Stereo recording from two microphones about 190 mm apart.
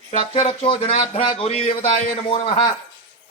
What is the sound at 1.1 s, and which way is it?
A man's voice, 30° left (ahead or behind).